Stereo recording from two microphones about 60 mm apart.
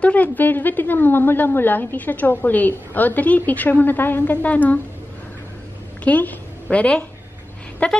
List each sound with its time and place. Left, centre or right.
0.0 s a woman's voice: left
6.0 s a woman's voice: left